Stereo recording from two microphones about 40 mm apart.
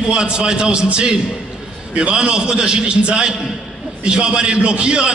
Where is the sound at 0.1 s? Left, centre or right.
Right.